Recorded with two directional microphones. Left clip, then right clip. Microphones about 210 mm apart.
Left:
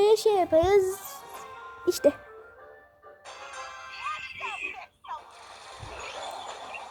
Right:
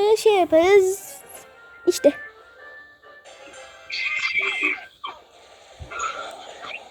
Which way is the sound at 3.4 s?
30° left (ahead or behind).